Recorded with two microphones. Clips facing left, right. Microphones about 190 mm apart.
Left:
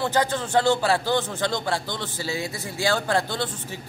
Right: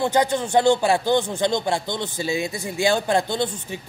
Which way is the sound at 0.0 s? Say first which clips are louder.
Right 3 dB; 15° right (ahead or behind).